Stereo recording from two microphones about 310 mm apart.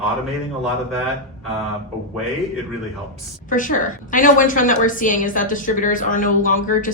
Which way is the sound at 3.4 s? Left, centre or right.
Left.